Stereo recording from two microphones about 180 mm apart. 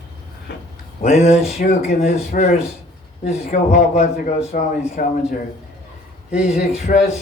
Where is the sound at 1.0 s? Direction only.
35° left (ahead or behind).